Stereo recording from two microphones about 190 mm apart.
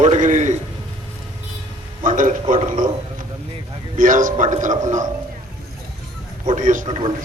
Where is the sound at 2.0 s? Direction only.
45° right (ahead or behind).